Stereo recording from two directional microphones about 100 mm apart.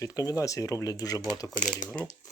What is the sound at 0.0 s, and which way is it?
Speech, 35° left (ahead or behind).